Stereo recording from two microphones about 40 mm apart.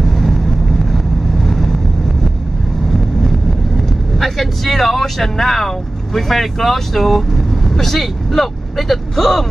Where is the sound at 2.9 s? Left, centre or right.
Centre.